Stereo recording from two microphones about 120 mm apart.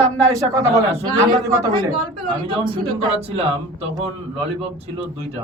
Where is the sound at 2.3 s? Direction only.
45° right (ahead or behind).